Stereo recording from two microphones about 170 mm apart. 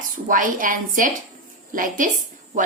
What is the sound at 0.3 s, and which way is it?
Speech, 50° right (ahead or behind).